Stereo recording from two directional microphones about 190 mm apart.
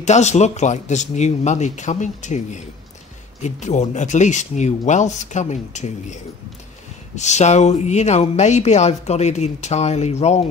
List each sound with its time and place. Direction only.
0.0 s speech: 35° left (ahead or behind)
7.2 s speech: 35° left (ahead or behind)